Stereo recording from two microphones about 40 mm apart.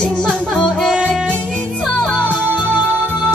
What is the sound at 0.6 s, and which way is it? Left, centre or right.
Music, centre.